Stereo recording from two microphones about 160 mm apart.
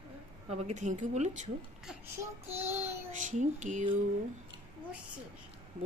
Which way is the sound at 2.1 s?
15° right (ahead or behind).